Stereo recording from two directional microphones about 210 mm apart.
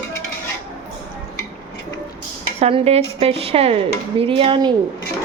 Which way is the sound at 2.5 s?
30° right (ahead or behind).